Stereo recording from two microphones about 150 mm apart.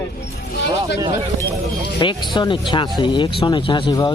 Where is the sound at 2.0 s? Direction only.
30° left (ahead or behind).